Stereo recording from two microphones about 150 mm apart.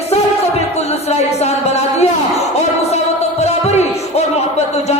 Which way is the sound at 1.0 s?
45° left (ahead or behind).